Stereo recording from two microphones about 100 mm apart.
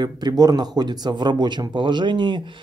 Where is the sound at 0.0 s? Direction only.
45° right (ahead or behind).